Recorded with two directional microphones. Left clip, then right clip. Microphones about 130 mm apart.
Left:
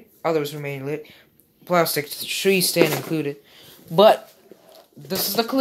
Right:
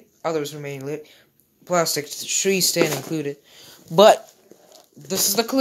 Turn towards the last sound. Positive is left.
turn(degrees=-50)  # may be behind; listen again after turning